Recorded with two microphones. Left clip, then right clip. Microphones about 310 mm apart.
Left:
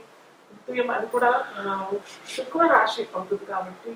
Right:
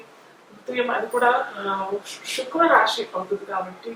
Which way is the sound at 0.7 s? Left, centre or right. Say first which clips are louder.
Right 1 dB; centre.